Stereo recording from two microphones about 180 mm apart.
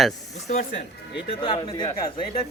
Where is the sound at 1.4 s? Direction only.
25° left (ahead or behind).